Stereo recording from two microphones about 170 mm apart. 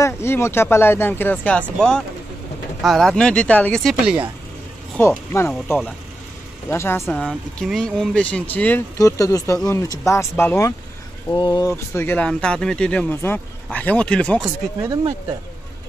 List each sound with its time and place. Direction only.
0.0 s speech: 15° left (ahead or behind); by 4.2 s centre (ahead or behind)
4.9 s speech: 10° left (ahead or behind)
11.3 s speech: 25° left (ahead or behind); by 14.4 s 5° left (ahead or behind)
14.8 s speech: 20° right (ahead or behind)